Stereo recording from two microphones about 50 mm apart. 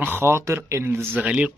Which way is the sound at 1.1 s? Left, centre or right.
Right.